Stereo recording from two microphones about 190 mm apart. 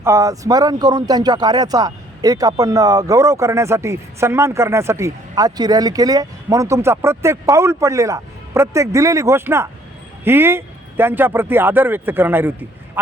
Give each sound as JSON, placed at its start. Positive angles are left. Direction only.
{"t": 0.0, "sound": "speech", "side_deg": -15}